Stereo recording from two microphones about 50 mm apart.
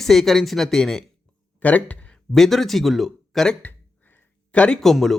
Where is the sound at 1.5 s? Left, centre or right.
Left.